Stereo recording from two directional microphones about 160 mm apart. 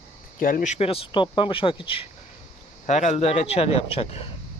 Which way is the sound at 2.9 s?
45° left (ahead or behind).